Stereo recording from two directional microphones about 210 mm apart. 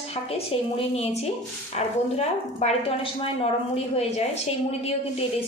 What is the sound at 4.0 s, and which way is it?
Speech, 30° left (ahead or behind).